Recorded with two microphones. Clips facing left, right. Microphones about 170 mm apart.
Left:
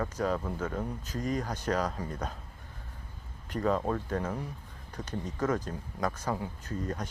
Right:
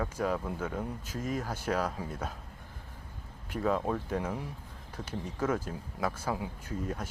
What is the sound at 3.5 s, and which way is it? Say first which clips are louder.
Speech: left 1 dB; 5° right (ahead or behind).